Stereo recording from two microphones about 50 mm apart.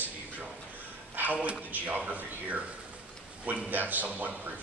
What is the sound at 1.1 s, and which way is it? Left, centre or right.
A man's voice, right.